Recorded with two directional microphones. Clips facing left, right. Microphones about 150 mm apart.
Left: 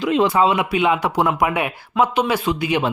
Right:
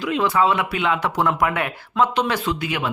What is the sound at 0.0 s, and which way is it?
Speech, 20° left (ahead or behind).